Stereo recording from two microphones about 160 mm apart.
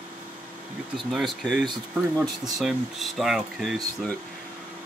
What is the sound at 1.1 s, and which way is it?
Speech, centre (ahead or behind).